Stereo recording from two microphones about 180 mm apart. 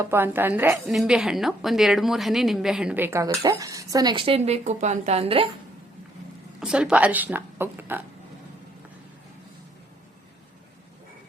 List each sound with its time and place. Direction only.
0.0 s a woman's voice: 10° right (ahead or behind); by 5.5 s 30° right (ahead or behind)
6.6 s a woman's voice: 5° right (ahead or behind)